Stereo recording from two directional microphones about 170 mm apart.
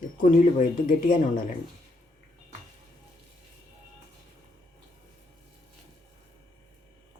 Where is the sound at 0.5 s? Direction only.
55° left (ahead or behind).